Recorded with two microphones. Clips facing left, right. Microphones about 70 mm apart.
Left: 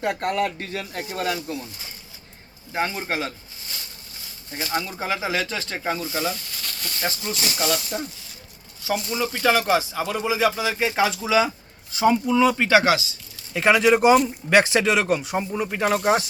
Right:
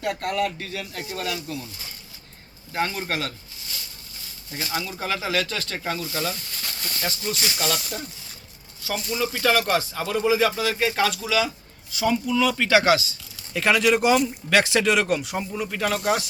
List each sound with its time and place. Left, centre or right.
0.0 s speech: left
4.7 s speech: left
4.9 s speech: centre
6.3 s a sound: centre
7.0 s speech: centre
8.8 s speech: centre